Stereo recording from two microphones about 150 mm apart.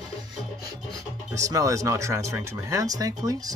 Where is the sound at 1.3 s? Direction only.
20° right (ahead or behind).